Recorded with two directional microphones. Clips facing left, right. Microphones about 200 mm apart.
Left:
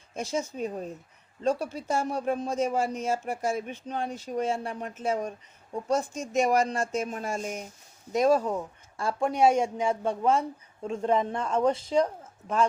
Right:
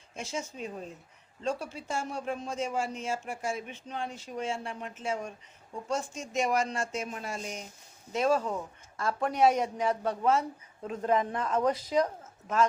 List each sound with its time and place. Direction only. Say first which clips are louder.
0.1 s speech: left 6 dB; 40° left (ahead or behind)
9.0 s speech: left 2 dB; 30° left (ahead or behind)